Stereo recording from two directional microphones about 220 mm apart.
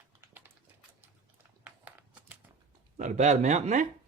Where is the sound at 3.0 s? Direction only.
30° right (ahead or behind).